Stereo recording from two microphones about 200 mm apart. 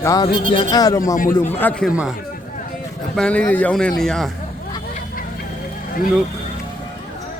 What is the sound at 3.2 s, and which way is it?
Speech, 5° left (ahead or behind).